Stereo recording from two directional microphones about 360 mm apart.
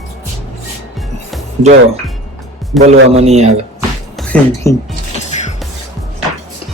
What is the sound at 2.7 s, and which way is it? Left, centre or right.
Speech, centre.